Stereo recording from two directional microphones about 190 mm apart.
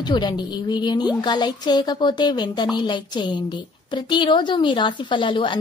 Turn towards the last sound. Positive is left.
turn(degrees=25)  # may be behind; listen again after turning